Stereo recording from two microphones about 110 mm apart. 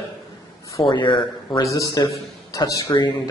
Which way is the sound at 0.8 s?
45° left (ahead or behind).